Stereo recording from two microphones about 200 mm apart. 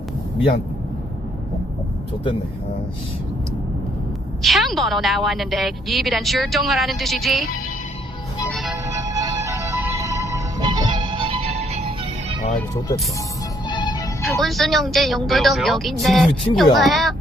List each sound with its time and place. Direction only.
4.4 s a woman's voice: centre (ahead or behind)
8.4 s music: centre (ahead or behind)
8.9 s music: 15° right (ahead or behind)
12.5 s speech: 15° left (ahead or behind)
13.7 s music: 20° left (ahead or behind)
14.2 s a woman's voice: centre (ahead or behind)